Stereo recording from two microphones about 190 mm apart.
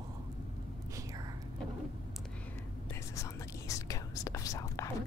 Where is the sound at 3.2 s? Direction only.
15° left (ahead or behind).